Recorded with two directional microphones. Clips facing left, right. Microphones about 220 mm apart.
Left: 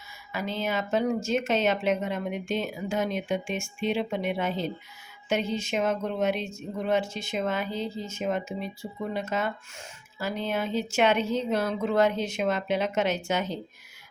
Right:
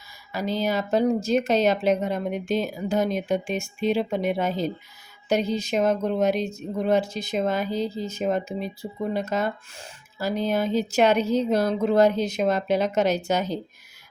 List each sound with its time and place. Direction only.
0.3 s speech: 35° right (ahead or behind)